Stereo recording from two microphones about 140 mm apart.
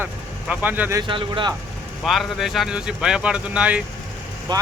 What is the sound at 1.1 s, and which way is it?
Speech, 35° right (ahead or behind).